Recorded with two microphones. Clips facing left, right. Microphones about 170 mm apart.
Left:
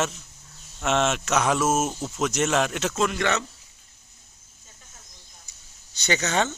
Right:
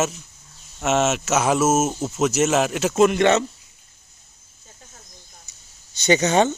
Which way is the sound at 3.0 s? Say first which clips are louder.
Right 9 dB; 20° right (ahead or behind).